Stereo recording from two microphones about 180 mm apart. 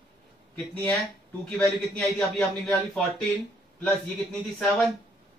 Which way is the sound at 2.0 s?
Centre (ahead or behind).